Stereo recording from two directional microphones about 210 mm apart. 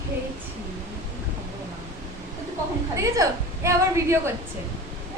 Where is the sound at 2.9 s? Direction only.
15° right (ahead or behind).